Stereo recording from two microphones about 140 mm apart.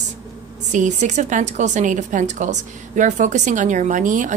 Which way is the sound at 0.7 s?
60° right (ahead or behind).